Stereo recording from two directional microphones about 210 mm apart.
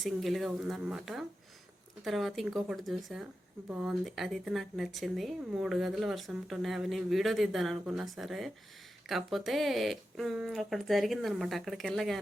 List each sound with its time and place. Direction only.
0.0 s speech: centre (ahead or behind)